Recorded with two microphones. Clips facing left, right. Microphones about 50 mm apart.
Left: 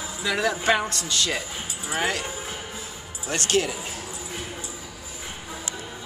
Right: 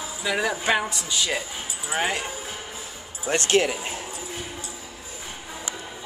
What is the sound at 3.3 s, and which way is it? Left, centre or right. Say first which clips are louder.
Speech: right 3 dB; right.